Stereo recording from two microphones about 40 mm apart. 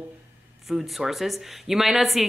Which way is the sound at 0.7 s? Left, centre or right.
Centre.